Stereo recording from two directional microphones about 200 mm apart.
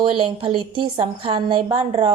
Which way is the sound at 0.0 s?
25° right (ahead or behind).